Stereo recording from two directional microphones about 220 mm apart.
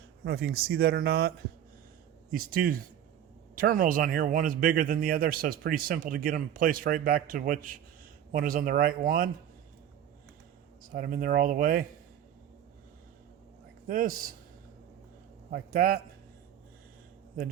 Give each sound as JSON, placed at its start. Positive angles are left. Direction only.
{"t": 0.3, "sound": "speech", "side_deg": -45}
{"t": 2.3, "sound": "speech", "side_deg": -40}
{"t": 10.9, "sound": "speech", "side_deg": -45}
{"t": 13.8, "sound": "speech", "side_deg": -40}
{"t": 15.4, "sound": "a man's voice", "side_deg": -45}